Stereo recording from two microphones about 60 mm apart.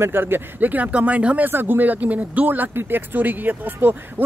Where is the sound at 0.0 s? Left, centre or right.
Right.